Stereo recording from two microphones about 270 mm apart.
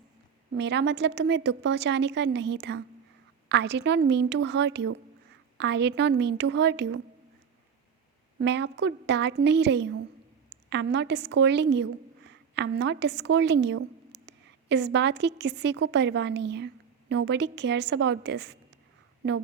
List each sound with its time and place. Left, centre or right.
0.5 s a woman's voice: right
8.4 s a woman's voice: right